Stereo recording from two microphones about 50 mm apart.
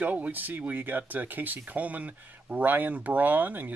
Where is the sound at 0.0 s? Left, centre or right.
Right.